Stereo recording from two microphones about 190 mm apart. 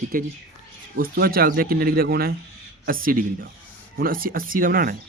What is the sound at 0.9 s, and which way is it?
Speech, 50° right (ahead or behind).